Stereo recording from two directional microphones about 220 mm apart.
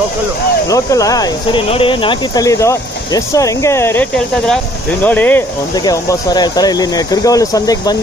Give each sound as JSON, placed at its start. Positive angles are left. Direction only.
{"t": 0.7, "sound": "speech", "side_deg": 15}
{"t": 5.9, "sound": "speech", "side_deg": 15}